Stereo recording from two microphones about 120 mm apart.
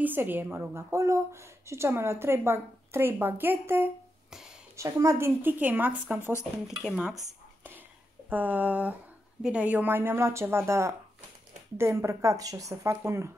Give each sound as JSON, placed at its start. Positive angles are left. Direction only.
{"t": 0.0, "sound": "a woman's voice", "side_deg": -15}
{"t": 4.3, "sound": "a sound", "side_deg": -5}
{"t": 4.7, "sound": "speech", "side_deg": -25}
{"t": 8.3, "sound": "a woman's voice", "side_deg": -15}